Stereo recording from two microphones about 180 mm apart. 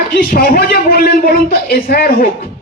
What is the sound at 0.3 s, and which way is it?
A man's voice, 60° left (ahead or behind).